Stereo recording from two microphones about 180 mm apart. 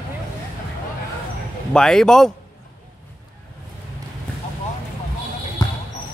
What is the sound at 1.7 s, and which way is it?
Speech, 5° left (ahead or behind).